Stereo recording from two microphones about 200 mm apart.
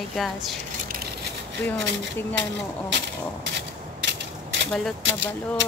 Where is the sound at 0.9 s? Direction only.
50° right (ahead or behind).